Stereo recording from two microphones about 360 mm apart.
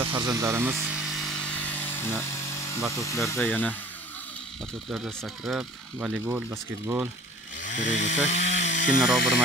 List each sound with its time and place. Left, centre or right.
0.0 s a sound: centre
2.7 s speech: centre
4.8 s speech: centre
7.6 s speech: left
8.5 s chainsaw: left